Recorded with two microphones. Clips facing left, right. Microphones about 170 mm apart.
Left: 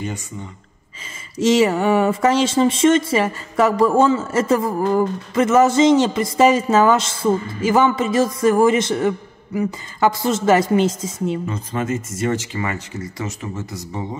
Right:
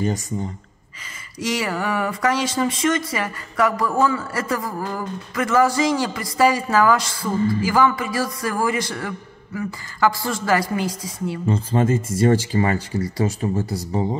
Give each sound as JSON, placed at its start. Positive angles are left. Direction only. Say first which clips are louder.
{"t": 0.0, "sound": "speech", "louder": "right 5 dB", "side_deg": -40}
{"t": 1.4, "sound": "speech", "louder": "left 9 dB", "side_deg": 25}
{"t": 11.4, "sound": "speech", "louder": "right 4 dB", "side_deg": -30}